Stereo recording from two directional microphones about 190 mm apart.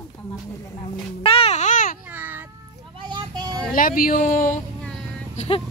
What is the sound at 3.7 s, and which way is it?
Speech, 45° left (ahead or behind).